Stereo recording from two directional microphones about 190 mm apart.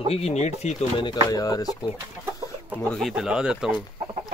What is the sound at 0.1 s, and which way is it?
Speech, 35° left (ahead or behind).